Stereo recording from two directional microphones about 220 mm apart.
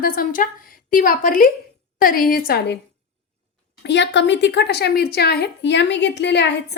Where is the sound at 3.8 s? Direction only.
50° left (ahead or behind).